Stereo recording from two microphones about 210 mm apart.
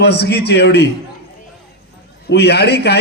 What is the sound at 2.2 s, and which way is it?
Speech, 50° left (ahead or behind).